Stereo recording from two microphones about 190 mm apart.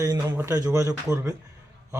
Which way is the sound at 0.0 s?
15° right (ahead or behind).